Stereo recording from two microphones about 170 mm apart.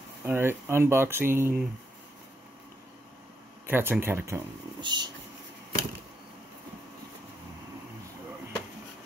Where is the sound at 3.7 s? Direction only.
10° right (ahead or behind).